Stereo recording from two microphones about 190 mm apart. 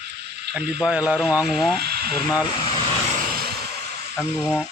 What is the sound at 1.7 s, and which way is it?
Speech, 55° right (ahead or behind).